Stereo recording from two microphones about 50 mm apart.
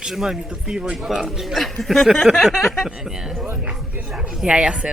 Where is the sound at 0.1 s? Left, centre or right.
Centre.